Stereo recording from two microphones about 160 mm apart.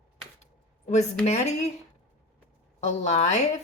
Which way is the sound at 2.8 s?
45° left (ahead or behind).